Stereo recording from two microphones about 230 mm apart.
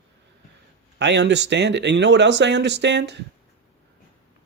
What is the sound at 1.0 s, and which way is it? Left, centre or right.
Speech, right.